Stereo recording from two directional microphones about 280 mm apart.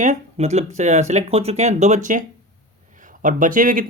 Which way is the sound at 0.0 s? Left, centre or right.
Right.